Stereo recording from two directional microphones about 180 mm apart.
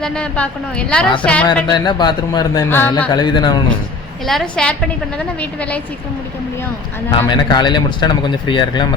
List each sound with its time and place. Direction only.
0.0 s a woman's voice: 5° left (ahead or behind)
1.7 s a man's voice: 25° left (ahead or behind)
3.1 s a man's voice: 25° left (ahead or behind)
4.3 s a woman's voice: 5° left (ahead or behind)
7.3 s a man's voice: 25° left (ahead or behind)